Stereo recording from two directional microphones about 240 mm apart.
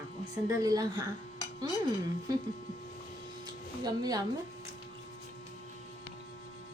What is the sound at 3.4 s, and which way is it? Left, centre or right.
Music, centre.